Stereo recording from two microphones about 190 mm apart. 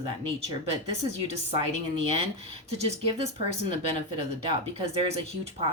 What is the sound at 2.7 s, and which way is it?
A woman's voice, 30° right (ahead or behind).